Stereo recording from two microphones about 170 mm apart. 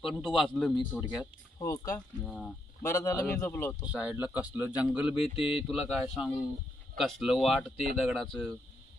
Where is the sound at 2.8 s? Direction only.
15° left (ahead or behind).